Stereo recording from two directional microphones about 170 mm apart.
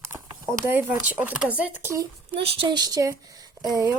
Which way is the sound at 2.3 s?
35° right (ahead or behind).